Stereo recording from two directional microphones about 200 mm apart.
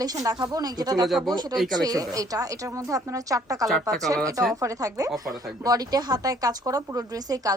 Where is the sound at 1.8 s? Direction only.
20° right (ahead or behind).